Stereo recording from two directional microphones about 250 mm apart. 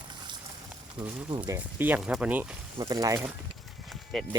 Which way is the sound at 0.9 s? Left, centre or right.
Centre.